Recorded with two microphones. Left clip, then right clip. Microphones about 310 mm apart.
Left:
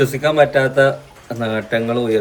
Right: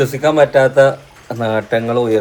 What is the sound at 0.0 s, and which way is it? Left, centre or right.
Speech, centre.